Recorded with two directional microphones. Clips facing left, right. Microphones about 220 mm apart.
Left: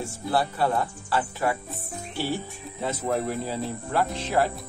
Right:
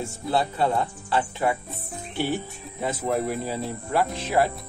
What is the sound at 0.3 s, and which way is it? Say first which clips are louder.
Speech: right 1 dB; 20° right (ahead or behind).